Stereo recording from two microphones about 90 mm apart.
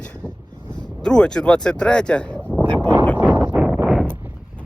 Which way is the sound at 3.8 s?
5° right (ahead or behind).